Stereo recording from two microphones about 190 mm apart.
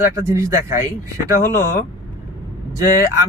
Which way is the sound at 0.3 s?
15° right (ahead or behind).